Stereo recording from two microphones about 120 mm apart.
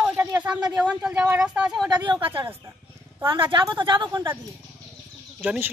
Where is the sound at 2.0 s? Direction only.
40° right (ahead or behind).